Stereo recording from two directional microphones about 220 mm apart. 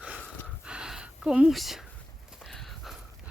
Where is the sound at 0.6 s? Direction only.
5° right (ahead or behind).